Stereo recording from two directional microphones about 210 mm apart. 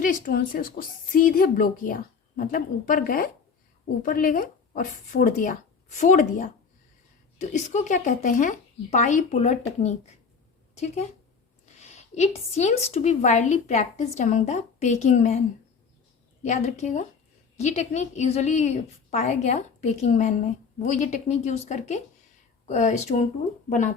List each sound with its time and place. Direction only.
0.0 s a woman's voice: 40° left (ahead or behind)
11.8 s a woman's voice: 30° left (ahead or behind)
16.4 s a woman's voice: 35° left (ahead or behind)